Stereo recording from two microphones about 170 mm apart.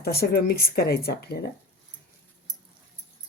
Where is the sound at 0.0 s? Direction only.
70° left (ahead or behind).